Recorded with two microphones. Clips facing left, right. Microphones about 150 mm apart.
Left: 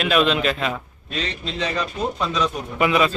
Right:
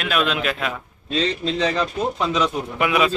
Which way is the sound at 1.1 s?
35° right (ahead or behind).